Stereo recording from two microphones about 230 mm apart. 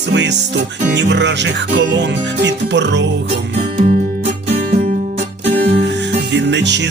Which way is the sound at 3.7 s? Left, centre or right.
Right.